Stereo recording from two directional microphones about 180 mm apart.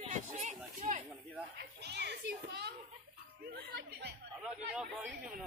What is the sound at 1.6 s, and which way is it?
Children playing, 70° right (ahead or behind).